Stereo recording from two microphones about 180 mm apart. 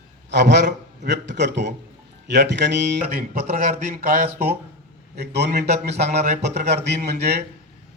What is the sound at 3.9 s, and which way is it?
Speech, 50° right (ahead or behind).